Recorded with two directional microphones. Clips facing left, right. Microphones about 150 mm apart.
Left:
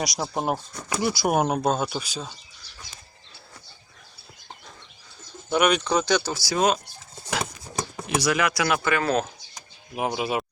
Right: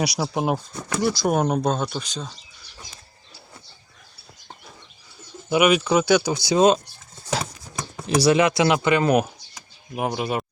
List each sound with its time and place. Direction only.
0.0 s speech: centre (ahead or behind)
0.9 s speech: 10° left (ahead or behind)
5.5 s speech: 5° right (ahead or behind)
6.3 s speech: 20° right (ahead or behind)
8.0 s speech: 30° right (ahead or behind)
9.9 s speech: centre (ahead or behind)